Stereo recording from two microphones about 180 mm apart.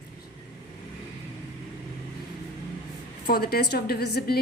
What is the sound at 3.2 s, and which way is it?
A woman's voice, 60° left (ahead or behind).